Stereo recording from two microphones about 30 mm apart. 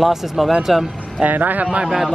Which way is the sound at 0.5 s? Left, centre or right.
Centre.